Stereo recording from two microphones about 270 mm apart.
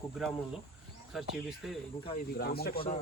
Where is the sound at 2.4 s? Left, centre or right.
Left.